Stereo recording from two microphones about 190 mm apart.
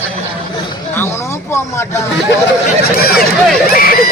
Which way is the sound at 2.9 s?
50° left (ahead or behind).